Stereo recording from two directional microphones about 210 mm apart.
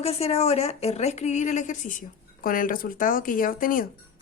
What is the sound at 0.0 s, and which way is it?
Speech, 30° left (ahead or behind).